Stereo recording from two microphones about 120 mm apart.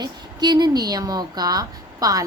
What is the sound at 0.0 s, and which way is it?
A woman's voice, 35° right (ahead or behind).